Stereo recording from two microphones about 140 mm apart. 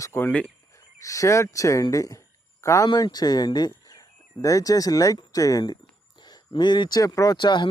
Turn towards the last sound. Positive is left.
turn(degrees=35)  # may be behind; listen again after turning